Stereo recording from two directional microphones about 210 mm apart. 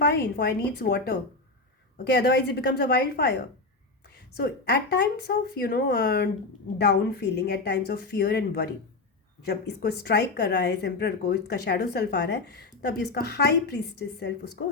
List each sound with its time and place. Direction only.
0.0 s speech: 50° left (ahead or behind)
4.4 s speech: 50° left (ahead or behind)